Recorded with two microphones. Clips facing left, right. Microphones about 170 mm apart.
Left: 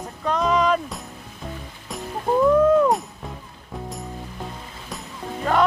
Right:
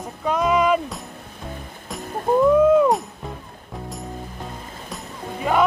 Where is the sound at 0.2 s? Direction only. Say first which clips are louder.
Right 1 dB; 10° right (ahead or behind).